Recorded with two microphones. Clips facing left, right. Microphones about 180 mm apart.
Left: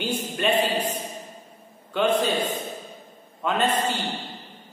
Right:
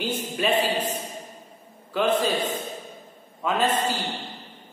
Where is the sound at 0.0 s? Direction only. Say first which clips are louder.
Even; centre (ahead or behind).